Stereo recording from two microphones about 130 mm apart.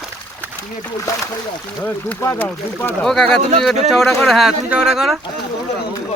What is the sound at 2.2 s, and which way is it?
Speech, 20° left (ahead or behind).